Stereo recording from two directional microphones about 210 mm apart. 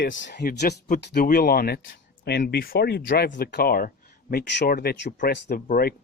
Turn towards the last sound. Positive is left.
turn(degrees=45)  # may be behind; listen again after turning